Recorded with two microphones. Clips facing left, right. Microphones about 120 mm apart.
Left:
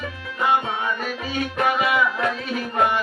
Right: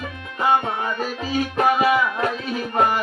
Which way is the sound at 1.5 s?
30° right (ahead or behind).